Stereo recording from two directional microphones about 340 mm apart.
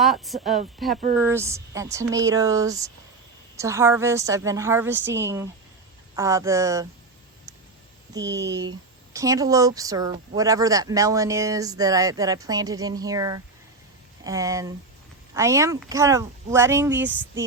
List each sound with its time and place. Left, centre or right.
0.0 s speech: centre
8.4 s speech: right
9.1 s speech: centre